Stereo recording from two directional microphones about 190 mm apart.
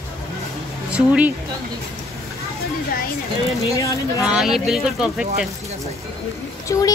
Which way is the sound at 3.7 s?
15° left (ahead or behind).